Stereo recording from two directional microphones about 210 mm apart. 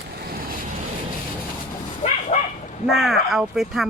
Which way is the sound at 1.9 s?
35° left (ahead or behind).